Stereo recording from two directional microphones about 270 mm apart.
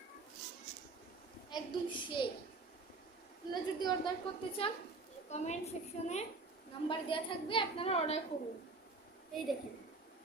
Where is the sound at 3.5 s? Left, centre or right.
Centre.